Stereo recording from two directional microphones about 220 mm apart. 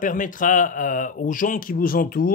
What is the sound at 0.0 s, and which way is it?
Speech, 35° left (ahead or behind).